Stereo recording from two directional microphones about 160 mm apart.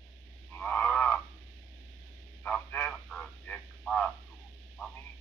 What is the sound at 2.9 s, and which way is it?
Frog, 5° left (ahead or behind).